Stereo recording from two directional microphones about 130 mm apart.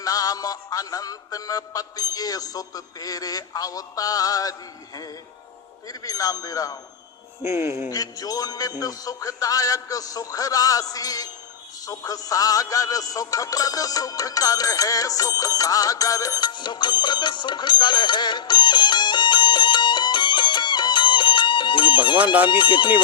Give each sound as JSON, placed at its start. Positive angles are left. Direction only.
{"t": 0.0, "sound": "music", "side_deg": 30}
{"t": 5.9, "sound": "music", "side_deg": 30}
{"t": 7.4, "sound": "speech", "side_deg": -20}
{"t": 7.9, "sound": "music", "side_deg": 30}
{"t": 22.2, "sound": "speech", "side_deg": -10}
{"t": 22.4, "sound": "speech", "side_deg": 40}